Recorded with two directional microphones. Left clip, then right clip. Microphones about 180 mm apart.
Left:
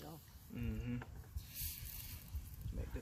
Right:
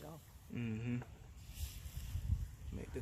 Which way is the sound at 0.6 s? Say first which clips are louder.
Right 3 dB; 65° right (ahead or behind).